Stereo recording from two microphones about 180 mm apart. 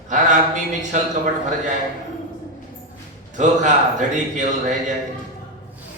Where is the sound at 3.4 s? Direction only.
45° right (ahead or behind).